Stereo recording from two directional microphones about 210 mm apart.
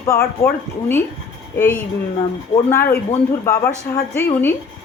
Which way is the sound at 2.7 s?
10° left (ahead or behind).